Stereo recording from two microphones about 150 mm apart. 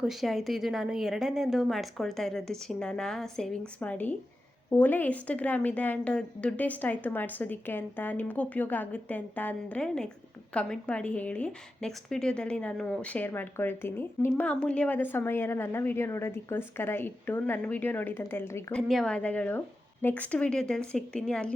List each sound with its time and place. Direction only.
0.0 s a woman's voice: centre (ahead or behind); by 18.6 s 15° left (ahead or behind)
18.7 s a woman's voice: 5° left (ahead or behind)